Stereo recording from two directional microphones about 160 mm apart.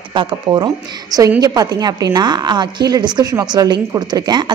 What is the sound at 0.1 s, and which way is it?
A woman's voice, 30° right (ahead or behind).